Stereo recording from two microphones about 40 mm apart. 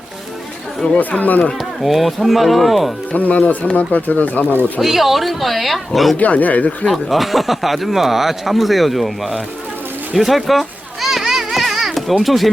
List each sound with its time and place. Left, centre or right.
0.9 s speech: left
1.8 s speech: centre
3.1 s speech: left
4.8 s speech: centre
6.1 s speech: left
6.8 s speech: centre
10.2 s a sound: centre
11.3 s children playing: centre
12.2 s speech: centre